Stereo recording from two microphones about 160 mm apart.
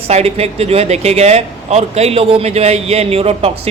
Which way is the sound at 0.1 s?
40° right (ahead or behind).